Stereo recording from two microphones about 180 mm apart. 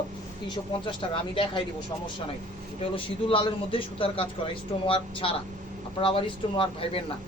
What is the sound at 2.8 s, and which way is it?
A man's voice, 30° left (ahead or behind).